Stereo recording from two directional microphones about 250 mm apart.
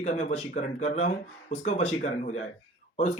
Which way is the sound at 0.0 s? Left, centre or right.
Left.